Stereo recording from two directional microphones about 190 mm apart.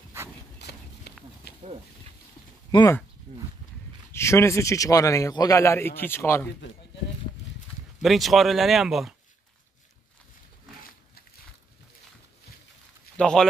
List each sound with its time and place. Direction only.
0.6 s run: 60° left (ahead or behind)
2.7 s speech: 20° left (ahead or behind)
3.3 s speech: 35° right (ahead or behind)
4.1 s a man's voice: 15° left (ahead or behind)
8.0 s speech: centre (ahead or behind)
13.2 s speech: 5° left (ahead or behind)